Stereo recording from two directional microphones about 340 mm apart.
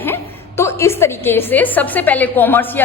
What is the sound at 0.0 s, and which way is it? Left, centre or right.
A woman's voice, centre.